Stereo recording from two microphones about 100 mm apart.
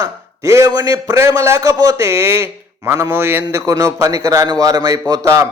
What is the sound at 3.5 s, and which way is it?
A man's voice, 35° right (ahead or behind).